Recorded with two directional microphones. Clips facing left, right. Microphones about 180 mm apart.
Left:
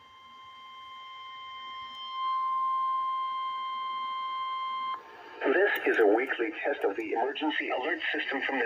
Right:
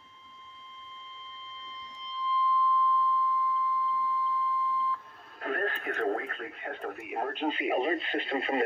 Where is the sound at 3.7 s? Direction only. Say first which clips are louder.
Right 7 dB; 70° left (ahead or behind).